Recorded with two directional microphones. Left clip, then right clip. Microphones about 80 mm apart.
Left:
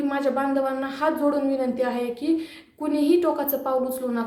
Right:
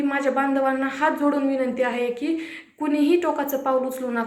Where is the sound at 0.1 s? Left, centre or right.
Left.